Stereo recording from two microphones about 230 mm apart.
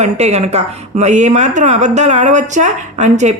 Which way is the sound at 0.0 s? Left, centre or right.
Right.